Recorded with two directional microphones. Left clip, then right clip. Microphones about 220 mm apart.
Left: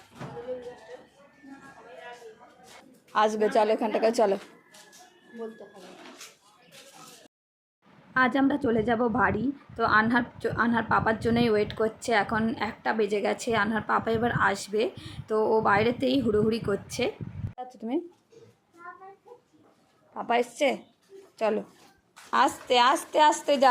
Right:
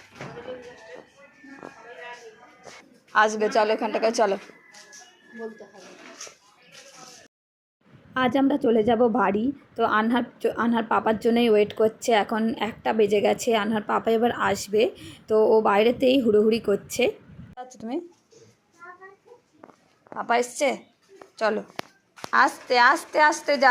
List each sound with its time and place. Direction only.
3.1 s a woman's voice: 15° left (ahead or behind)
8.1 s a woman's voice: centre (ahead or behind)
17.6 s speech: 10° left (ahead or behind)
20.1 s a woman's voice: 5° left (ahead or behind)